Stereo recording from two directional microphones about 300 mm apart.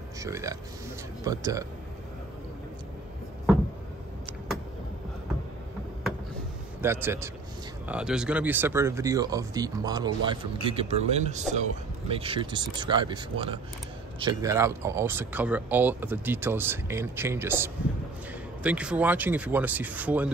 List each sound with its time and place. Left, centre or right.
0.2 s speech: centre
6.8 s speech: centre